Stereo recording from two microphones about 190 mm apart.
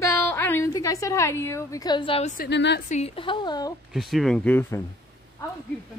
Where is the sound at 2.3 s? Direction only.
65° left (ahead or behind).